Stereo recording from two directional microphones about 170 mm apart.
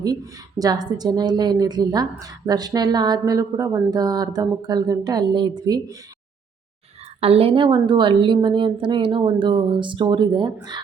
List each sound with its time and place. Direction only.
0.6 s a woman's voice: 25° right (ahead or behind)
7.2 s a woman's voice: 35° right (ahead or behind)